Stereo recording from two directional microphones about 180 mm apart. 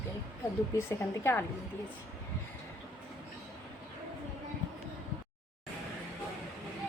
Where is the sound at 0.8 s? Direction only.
15° left (ahead or behind).